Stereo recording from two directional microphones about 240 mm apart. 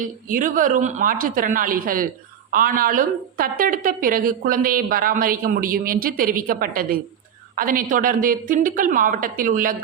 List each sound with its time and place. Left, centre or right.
0.0 s a woman's voice: right